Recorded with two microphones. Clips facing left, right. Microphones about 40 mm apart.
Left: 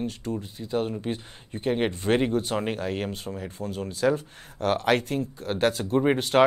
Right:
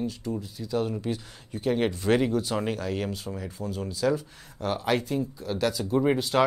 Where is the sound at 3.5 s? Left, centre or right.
Left.